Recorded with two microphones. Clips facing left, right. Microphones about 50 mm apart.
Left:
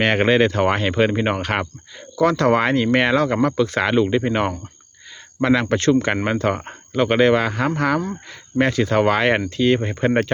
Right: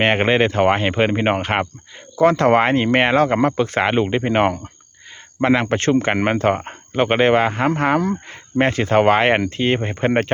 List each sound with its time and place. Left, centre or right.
0.0 s speech: right